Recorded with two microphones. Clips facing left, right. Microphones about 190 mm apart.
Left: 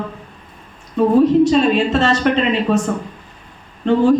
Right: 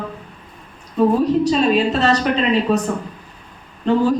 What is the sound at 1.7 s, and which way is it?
A woman's voice, 40° right (ahead or behind).